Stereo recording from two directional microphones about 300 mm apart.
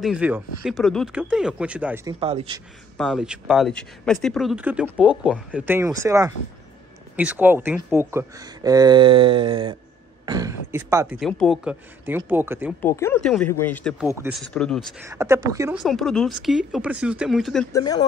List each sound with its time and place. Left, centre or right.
0.0 s speech: centre
2.1 s speech: centre
3.0 s speech: centre
12.8 s speech: centre
15.0 s speech: centre
17.7 s speech: centre